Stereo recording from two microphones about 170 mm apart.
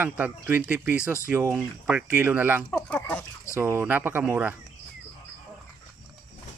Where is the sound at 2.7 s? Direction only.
10° left (ahead or behind).